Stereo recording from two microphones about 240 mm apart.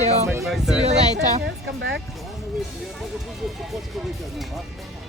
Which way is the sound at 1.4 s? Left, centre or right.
Right.